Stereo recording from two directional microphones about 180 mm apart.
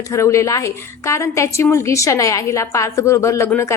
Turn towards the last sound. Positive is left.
turn(degrees=15)  # may be behind; listen again after turning